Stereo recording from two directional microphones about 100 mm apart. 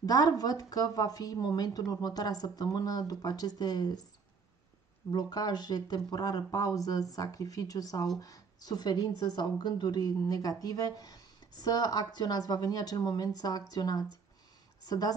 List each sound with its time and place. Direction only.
0.0 s a woman's voice: 40° left (ahead or behind)
5.1 s a woman's voice: 40° left (ahead or behind)